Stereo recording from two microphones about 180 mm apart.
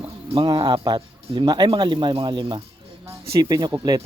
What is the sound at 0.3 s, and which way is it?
Speech, 25° right (ahead or behind).